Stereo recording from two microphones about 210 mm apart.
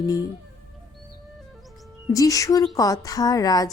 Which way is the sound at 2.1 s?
15° left (ahead or behind).